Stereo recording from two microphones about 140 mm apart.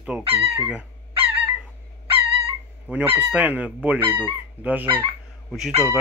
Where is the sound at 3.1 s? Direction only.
10° right (ahead or behind).